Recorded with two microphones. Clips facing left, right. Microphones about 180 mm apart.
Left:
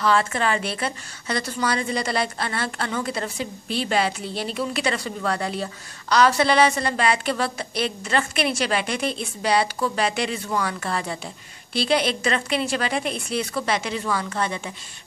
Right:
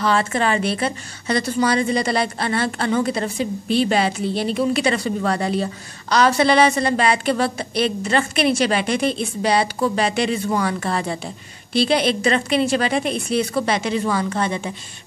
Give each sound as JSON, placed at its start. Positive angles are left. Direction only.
{"t": 0.0, "sound": "a woman's voice", "side_deg": -25}